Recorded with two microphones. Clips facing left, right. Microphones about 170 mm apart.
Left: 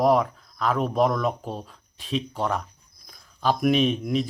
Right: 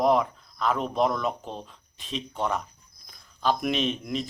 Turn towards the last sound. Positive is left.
turn(degrees=5)  # may be behind; listen again after turning